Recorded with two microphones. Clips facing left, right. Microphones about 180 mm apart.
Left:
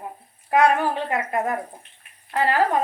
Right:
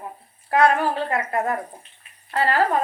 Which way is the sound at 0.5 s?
15° left (ahead or behind).